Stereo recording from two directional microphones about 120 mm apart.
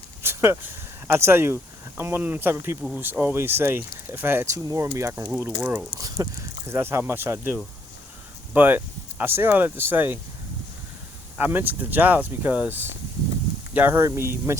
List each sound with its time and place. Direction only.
0.2 s a sound: 20° right (ahead or behind)
2.0 s speech: 20° right (ahead or behind)
6.7 s speech: 20° right (ahead or behind)
11.3 s speech: 15° right (ahead or behind)